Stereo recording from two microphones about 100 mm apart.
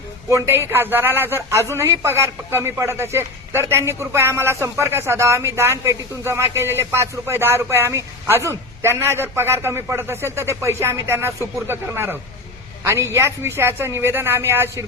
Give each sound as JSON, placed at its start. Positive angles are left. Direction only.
{"t": 0.3, "sound": "a man's voice", "side_deg": -25}